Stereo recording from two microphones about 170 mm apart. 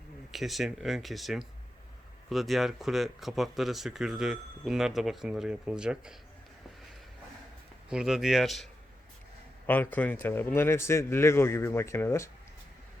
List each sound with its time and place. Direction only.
0.3 s speech: centre (ahead or behind)
7.9 s speech: 5° right (ahead or behind)
9.6 s a man's voice: 10° left (ahead or behind)